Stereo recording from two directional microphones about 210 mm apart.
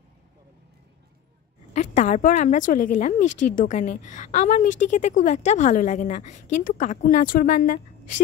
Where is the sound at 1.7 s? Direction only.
35° left (ahead or behind).